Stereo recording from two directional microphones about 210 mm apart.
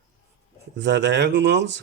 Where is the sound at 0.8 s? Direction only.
55° right (ahead or behind).